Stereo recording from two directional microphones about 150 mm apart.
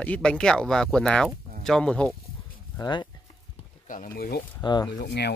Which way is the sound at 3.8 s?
60° left (ahead or behind).